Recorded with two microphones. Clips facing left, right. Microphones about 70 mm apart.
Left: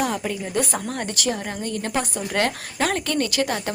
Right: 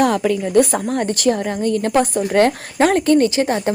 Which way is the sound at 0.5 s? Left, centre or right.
Right.